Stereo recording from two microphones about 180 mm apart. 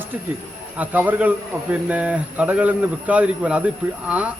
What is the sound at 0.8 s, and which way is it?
A man's voice, 10° right (ahead or behind).